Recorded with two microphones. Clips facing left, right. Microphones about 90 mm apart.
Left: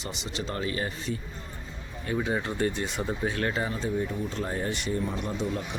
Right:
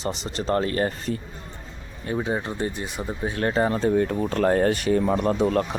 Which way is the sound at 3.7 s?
60° right (ahead or behind).